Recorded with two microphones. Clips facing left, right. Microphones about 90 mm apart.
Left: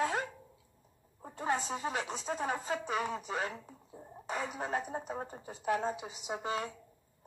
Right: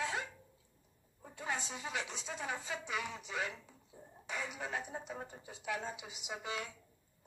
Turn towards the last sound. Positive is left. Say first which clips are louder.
# left 6 dB
turn(degrees=40)  # may be behind; listen again after turning